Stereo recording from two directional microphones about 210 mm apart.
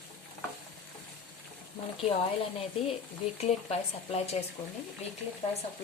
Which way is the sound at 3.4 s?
30° left (ahead or behind).